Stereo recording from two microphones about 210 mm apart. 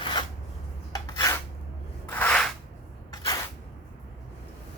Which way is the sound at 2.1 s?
5° left (ahead or behind).